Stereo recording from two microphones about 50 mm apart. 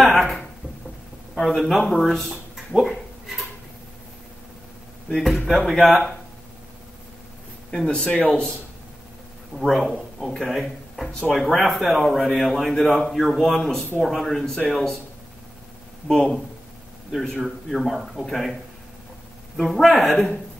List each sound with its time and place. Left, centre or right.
0.0 s a sound: centre
5.1 s speech: centre
7.7 s speech: centre
9.7 s a man's voice: centre
11.1 s speech: centre
11.3 s speech: centre
16.1 s speech: centre
17.4 s speech: centre